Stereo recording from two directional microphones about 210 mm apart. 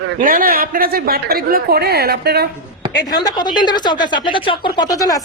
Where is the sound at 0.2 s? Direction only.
40° right (ahead or behind).